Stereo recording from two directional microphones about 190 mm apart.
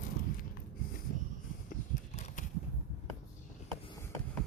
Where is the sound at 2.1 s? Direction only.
40° left (ahead or behind).